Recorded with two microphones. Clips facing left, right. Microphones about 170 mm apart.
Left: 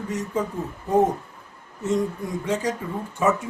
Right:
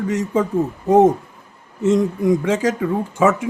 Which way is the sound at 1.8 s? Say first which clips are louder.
Right 8 dB; 90° right.